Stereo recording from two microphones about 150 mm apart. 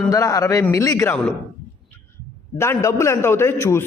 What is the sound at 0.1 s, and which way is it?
A man's voice, 20° left (ahead or behind).